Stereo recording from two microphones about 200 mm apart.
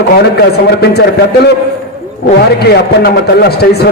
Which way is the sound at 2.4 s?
55° left (ahead or behind).